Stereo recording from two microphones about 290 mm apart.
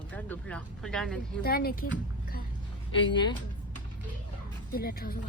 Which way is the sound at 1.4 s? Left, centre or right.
Left.